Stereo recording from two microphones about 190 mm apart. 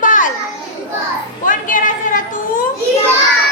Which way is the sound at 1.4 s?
45° left (ahead or behind).